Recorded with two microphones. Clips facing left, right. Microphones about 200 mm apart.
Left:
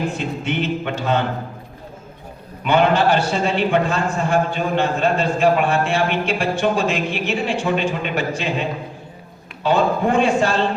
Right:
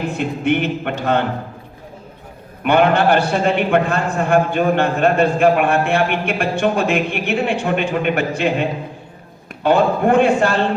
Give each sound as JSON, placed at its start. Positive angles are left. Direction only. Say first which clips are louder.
{"t": 0.2, "sound": "a man's voice", "louder": "right 5 dB", "side_deg": -55}
{"t": 2.6, "sound": "a man's voice", "louder": "right 2 dB", "side_deg": -60}
{"t": 9.6, "sound": "a man's voice", "louder": "right 3 dB", "side_deg": -60}